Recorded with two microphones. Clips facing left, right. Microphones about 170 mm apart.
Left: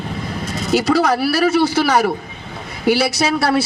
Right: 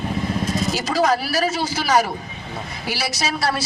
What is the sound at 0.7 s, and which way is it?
A woman's voice, 60° left (ahead or behind).